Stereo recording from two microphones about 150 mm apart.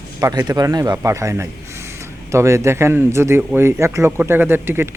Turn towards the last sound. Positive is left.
turn(degrees=-15)  # may be behind; listen again after turning